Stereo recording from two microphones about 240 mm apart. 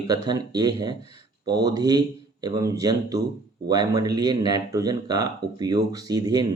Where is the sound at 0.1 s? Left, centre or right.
Centre.